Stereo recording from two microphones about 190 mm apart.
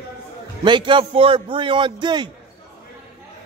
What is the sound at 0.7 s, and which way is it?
A man's voice, 25° right (ahead or behind).